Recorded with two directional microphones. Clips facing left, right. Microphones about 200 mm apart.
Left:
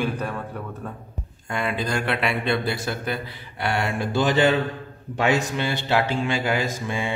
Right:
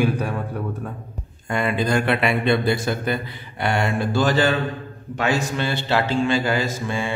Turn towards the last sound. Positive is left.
turn(degrees=15)  # may be behind; listen again after turning